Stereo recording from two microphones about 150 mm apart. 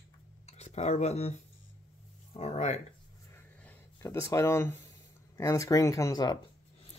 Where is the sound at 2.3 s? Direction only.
45° left (ahead or behind).